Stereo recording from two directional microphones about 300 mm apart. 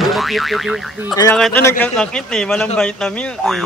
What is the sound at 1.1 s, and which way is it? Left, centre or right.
A man's voice, centre.